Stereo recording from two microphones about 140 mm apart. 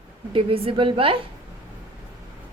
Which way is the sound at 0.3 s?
40° right (ahead or behind).